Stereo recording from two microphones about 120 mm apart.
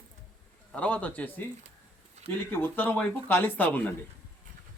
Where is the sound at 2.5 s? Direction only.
15° left (ahead or behind).